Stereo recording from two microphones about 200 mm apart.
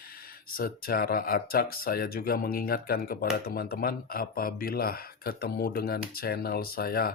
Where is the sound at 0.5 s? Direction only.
45° left (ahead or behind).